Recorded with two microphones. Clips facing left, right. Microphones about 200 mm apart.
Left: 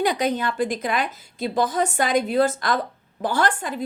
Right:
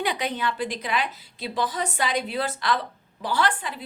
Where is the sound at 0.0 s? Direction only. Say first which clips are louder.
Left 5 dB; 45° left (ahead or behind).